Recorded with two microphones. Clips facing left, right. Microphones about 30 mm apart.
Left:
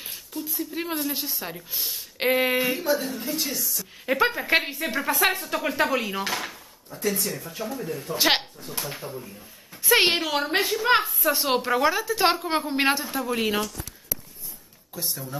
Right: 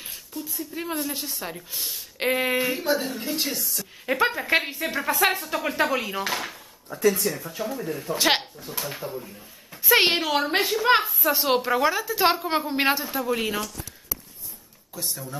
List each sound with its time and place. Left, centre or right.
0.6 s speech: centre
1.1 s a woman's voice: centre
2.8 s speech: centre
3.3 s speech: right
4.0 s a woman's voice: centre
7.0 s speech: right
7.6 s speech: centre
8.2 s speech: centre
8.8 s a woman's voice: centre
15.0 s a woman's voice: centre